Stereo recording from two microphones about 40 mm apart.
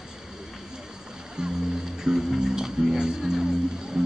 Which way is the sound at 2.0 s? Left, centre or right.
Centre.